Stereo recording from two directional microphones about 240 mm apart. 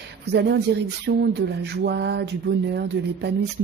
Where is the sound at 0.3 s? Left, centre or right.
Right.